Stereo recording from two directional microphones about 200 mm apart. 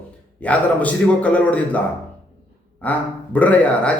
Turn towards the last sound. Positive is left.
turn(degrees=5)  # may be behind; listen again after turning